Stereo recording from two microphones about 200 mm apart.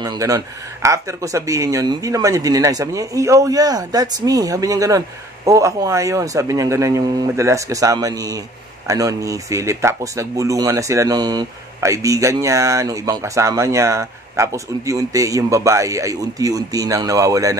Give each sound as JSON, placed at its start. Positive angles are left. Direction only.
{"t": 0.0, "sound": "speech", "side_deg": -20}